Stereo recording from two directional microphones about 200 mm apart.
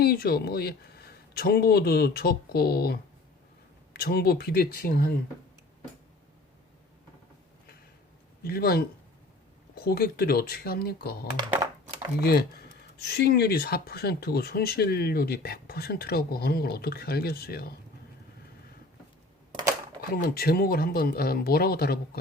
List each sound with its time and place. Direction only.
0.0 s speech: 50° left (ahead or behind)
8.4 s speech: 50° left (ahead or behind)
20.2 s speech: 50° left (ahead or behind)